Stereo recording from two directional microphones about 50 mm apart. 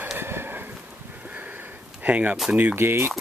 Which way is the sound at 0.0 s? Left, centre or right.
Right.